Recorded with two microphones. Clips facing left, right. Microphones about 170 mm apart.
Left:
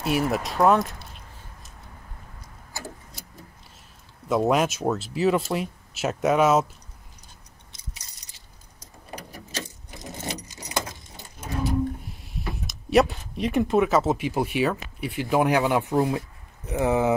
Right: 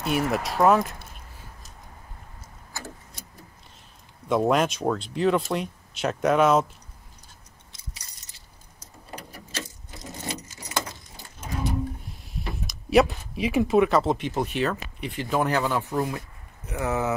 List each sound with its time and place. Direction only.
0.0 s speech: centre (ahead or behind)
4.3 s speech: centre (ahead or behind)
9.1 s keys jangling: 15° left (ahead or behind)
12.4 s speech: centre (ahead or behind); by 17.1 s 20° left (ahead or behind)